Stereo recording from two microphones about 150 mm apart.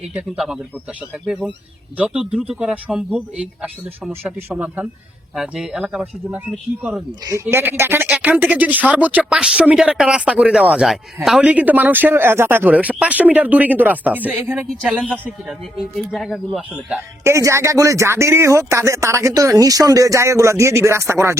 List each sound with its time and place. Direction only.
0.1 s speech: 5° right (ahead or behind)
2.0 s speech: 5° right (ahead or behind)
17.2 s speech: 20° right (ahead or behind)